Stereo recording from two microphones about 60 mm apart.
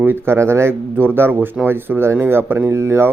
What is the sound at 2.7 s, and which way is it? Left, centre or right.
Speech, right.